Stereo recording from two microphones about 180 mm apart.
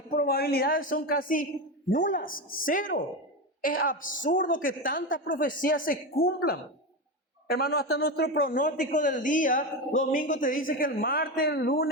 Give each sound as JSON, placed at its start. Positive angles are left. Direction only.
{"t": 0.1, "sound": "a man's voice", "side_deg": 55}